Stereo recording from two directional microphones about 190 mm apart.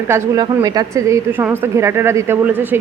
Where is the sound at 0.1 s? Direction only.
20° right (ahead or behind).